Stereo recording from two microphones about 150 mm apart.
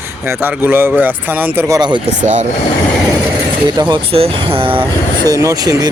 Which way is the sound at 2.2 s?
55° right (ahead or behind).